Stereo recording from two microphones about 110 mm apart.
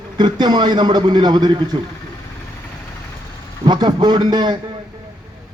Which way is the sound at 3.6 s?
40° right (ahead or behind).